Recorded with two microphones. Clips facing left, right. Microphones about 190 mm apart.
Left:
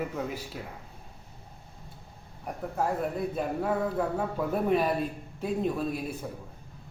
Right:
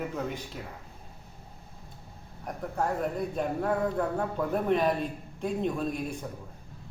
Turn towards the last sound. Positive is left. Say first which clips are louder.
# even
turn(degrees=5)  # may be behind; listen again after turning